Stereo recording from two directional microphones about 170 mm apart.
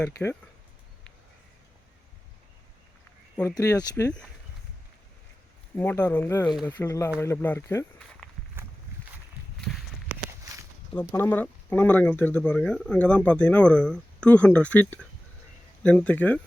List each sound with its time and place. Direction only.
0.0 s speech: 10° left (ahead or behind)
3.4 s speech: 20° left (ahead or behind)
5.7 s speech: 10° left (ahead or behind)
9.6 s walk: centre (ahead or behind)
10.9 s speech: 10° left (ahead or behind)